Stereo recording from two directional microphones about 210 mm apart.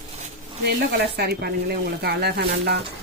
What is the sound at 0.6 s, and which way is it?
Speech, 50° right (ahead or behind).